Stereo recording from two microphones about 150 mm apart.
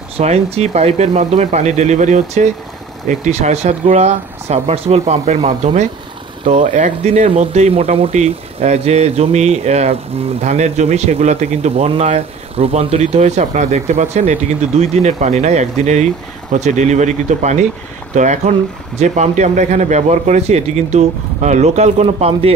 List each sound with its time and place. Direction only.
0.2 s a man's voice: 45° right (ahead or behind)